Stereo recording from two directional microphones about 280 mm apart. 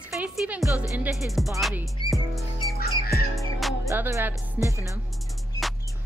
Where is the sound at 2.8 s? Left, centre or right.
Left.